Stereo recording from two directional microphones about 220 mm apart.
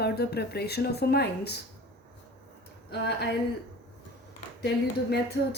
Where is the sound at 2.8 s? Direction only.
50° left (ahead or behind).